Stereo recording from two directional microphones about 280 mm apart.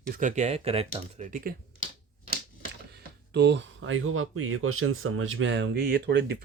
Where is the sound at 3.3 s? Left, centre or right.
Right.